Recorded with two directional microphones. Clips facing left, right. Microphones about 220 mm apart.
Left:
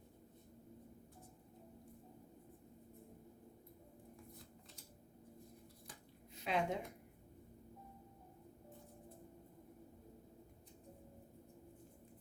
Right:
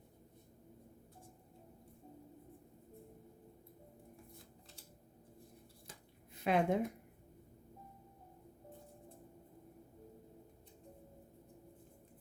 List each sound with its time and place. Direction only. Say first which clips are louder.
6.3 s a woman's voice: right 6 dB; 55° right (ahead or behind)